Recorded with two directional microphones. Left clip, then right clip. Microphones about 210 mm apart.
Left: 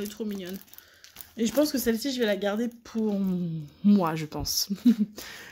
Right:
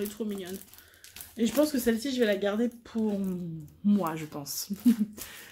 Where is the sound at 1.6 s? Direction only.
45° left (ahead or behind).